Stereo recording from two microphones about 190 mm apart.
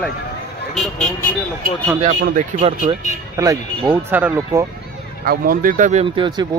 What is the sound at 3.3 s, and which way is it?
A man's voice, 15° right (ahead or behind).